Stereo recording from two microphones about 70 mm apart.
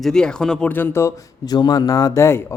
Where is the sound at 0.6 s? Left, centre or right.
Left.